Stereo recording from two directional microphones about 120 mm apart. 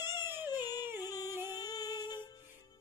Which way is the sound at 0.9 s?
30° left (ahead or behind).